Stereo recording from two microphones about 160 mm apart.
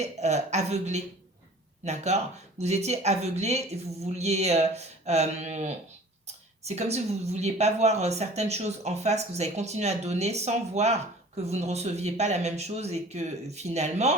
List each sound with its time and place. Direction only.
0.0 s a woman's voice: 45° right (ahead or behind)